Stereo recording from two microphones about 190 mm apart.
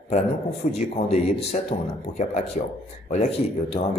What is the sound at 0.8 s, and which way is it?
Speech, 35° left (ahead or behind).